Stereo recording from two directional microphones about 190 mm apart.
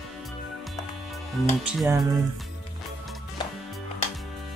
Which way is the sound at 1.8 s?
20° right (ahead or behind).